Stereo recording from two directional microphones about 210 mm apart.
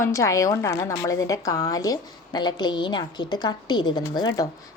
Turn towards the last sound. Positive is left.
turn(degrees=20)  # may be behind; listen again after turning